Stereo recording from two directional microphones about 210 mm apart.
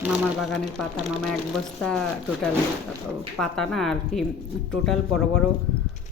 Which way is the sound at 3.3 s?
5° left (ahead or behind).